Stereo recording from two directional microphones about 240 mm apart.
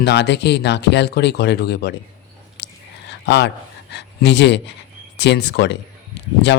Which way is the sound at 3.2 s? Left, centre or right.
Left.